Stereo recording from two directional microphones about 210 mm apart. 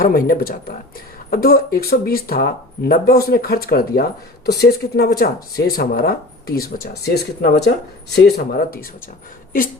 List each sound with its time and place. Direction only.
0.0 s speech: 45° left (ahead or behind)